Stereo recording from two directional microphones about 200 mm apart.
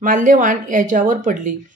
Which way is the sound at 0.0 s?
45° right (ahead or behind).